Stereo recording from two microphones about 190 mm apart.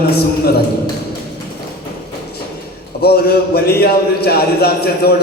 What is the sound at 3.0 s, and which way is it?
A man's voice, 55° left (ahead or behind).